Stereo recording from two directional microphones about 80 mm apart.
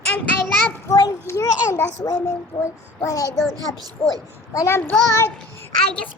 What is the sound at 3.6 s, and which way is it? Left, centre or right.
Speech, right.